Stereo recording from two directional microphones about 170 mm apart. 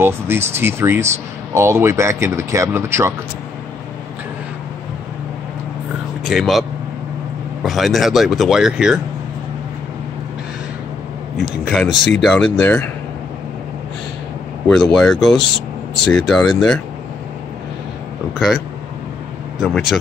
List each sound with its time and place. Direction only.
0.6 s speech: 15° right (ahead or behind)
6.2 s speech: centre (ahead or behind)
7.6 s speech: centre (ahead or behind)
11.3 s speech: 5° right (ahead or behind)
14.7 s speech: centre (ahead or behind)
18.3 s speech: centre (ahead or behind)
19.6 s speech: centre (ahead or behind)